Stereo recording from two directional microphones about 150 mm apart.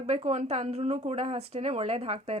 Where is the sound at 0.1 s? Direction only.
45° right (ahead or behind).